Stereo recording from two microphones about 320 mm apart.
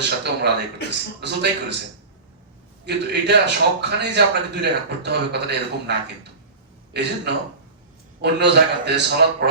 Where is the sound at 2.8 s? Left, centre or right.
Right.